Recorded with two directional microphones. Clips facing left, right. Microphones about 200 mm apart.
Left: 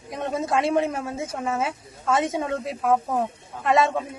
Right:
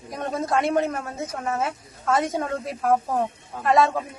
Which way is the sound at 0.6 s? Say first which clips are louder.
Even; 25° left (ahead or behind).